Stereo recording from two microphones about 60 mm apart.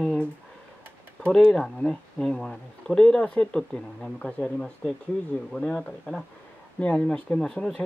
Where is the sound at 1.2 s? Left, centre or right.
Centre.